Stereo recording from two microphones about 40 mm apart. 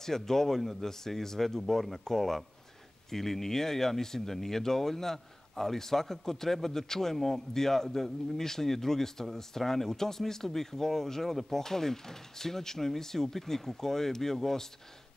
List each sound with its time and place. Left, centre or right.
0.0 s speech: centre